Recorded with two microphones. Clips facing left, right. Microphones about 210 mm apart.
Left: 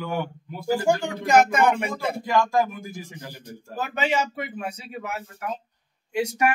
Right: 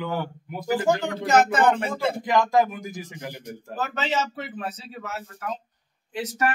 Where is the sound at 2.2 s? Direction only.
20° right (ahead or behind).